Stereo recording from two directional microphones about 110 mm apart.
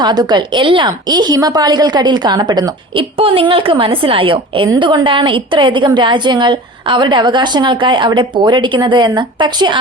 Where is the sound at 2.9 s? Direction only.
55° right (ahead or behind).